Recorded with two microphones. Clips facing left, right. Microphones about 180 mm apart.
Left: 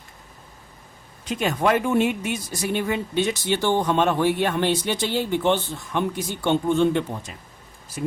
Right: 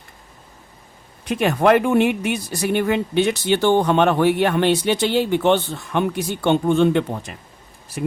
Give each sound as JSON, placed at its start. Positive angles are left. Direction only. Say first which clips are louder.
{"t": 1.2, "sound": "speech", "louder": "right 5 dB", "side_deg": -60}